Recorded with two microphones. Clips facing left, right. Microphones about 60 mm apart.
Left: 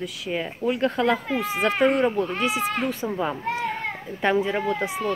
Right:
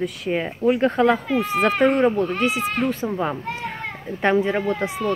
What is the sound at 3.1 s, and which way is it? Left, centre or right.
Speech, centre.